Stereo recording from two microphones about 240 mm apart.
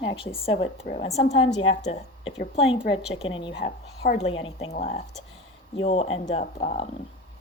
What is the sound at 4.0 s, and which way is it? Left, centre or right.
A woman's voice, left.